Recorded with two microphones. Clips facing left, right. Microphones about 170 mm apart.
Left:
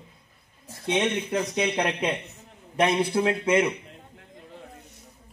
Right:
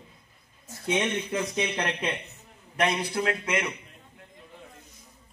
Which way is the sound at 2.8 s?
25° left (ahead or behind).